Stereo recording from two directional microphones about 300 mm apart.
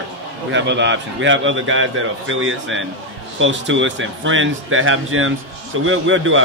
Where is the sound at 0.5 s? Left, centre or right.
Right.